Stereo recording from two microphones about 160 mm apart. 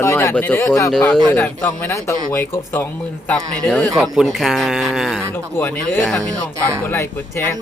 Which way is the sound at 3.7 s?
Centre (ahead or behind).